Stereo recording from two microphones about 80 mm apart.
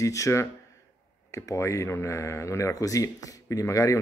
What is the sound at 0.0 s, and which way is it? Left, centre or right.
Speech, left.